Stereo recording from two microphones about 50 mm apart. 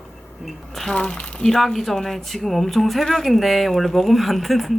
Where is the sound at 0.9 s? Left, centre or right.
Left.